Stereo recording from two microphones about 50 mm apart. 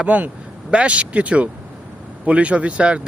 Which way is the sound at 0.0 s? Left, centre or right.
Right.